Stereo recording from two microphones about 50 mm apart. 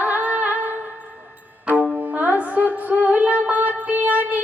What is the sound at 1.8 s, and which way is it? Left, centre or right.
Music, right.